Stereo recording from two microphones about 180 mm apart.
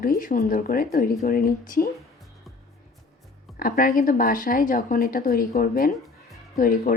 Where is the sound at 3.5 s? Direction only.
55° left (ahead or behind).